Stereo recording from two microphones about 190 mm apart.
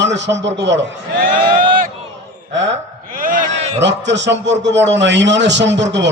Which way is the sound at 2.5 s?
70° right (ahead or behind).